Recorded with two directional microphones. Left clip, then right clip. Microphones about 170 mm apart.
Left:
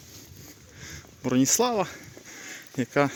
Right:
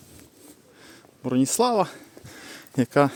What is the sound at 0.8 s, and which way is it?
Speech, 10° right (ahead or behind).